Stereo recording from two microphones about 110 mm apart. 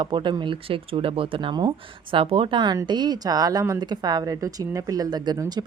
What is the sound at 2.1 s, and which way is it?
Speech, 60° right (ahead or behind).